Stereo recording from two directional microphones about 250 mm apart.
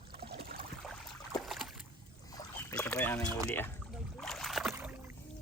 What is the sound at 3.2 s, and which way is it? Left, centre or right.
Speech, centre.